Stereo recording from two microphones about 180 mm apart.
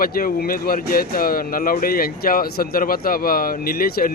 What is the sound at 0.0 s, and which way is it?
Speech, 55° left (ahead or behind).